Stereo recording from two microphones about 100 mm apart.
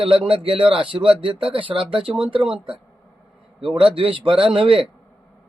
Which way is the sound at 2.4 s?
10° right (ahead or behind).